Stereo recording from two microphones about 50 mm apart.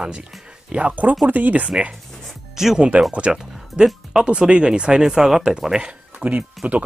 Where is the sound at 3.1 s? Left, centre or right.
Centre.